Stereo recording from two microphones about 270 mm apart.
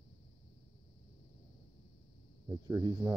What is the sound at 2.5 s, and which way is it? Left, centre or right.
Speech, centre.